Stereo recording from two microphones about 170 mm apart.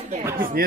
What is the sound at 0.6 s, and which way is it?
Speech, 60° right (ahead or behind).